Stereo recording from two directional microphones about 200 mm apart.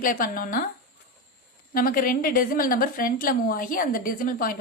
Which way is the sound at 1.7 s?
45° left (ahead or behind).